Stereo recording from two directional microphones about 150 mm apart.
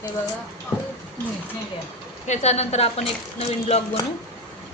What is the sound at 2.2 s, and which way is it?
Speech, 50° left (ahead or behind).